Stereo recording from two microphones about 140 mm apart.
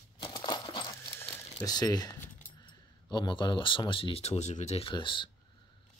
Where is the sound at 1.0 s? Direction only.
15° left (ahead or behind).